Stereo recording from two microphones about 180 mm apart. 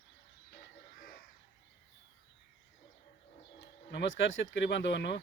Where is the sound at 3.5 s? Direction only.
75° left (ahead or behind).